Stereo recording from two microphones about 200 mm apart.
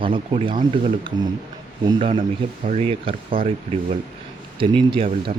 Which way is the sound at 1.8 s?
25° right (ahead or behind).